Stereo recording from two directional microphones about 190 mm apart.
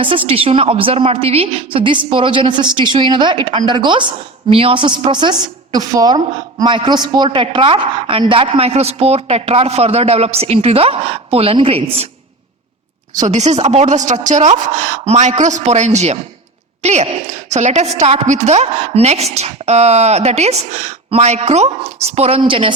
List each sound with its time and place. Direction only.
0.3 s a woman's voice: 30° right (ahead or behind)
13.1 s a woman's voice: 40° right (ahead or behind)